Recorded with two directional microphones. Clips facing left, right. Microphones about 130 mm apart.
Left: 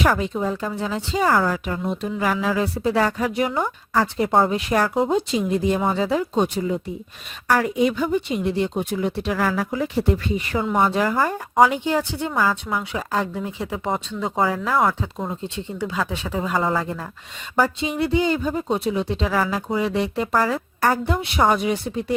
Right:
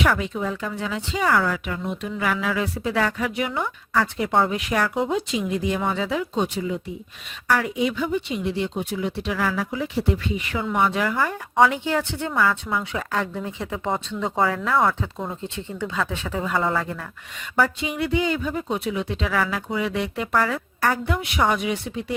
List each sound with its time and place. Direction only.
0.0 s speech: 35° left (ahead or behind)
11.7 s speech: 15° left (ahead or behind)
15.4 s speech: 15° left (ahead or behind)
17.6 s speech: 30° left (ahead or behind)